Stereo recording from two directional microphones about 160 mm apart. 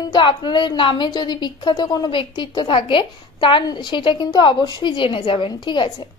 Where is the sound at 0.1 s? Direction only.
30° left (ahead or behind).